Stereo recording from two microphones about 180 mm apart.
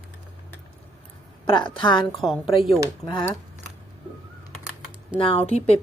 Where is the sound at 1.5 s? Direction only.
25° left (ahead or behind).